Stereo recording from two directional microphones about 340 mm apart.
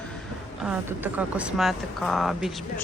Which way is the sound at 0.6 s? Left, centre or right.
Centre.